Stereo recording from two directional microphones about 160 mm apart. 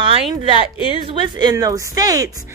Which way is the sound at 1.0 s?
30° right (ahead or behind).